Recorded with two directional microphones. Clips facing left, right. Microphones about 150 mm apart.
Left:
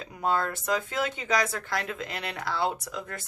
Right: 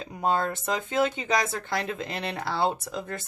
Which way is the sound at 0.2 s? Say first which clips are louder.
Right 2 dB; 25° right (ahead or behind).